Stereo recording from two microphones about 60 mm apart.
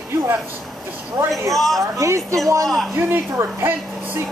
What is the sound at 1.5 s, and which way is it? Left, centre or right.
Speech, centre.